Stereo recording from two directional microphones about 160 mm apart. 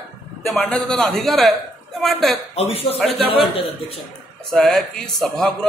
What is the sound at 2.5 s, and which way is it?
Speech, 40° left (ahead or behind).